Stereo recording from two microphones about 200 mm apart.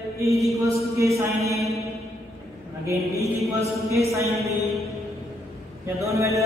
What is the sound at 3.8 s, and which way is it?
Mantra, 15° right (ahead or behind).